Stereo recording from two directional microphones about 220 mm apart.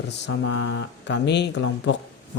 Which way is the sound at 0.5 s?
50° left (ahead or behind).